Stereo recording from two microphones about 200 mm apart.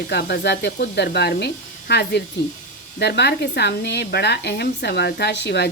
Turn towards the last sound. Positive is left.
turn(degrees=60)  # may be behind; listen again after turning